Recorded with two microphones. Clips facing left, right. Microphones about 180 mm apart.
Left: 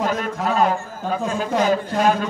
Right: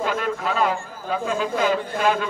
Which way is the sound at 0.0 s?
40° left (ahead or behind).